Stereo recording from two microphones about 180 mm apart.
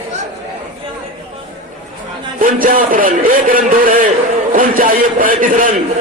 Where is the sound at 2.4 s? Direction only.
50° right (ahead or behind).